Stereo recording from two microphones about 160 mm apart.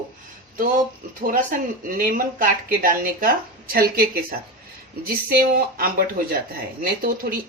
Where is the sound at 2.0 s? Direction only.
60° right (ahead or behind).